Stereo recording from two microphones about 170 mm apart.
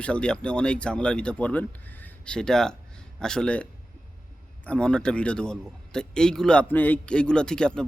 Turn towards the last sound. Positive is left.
turn(degrees=5)  # may be behind; listen again after turning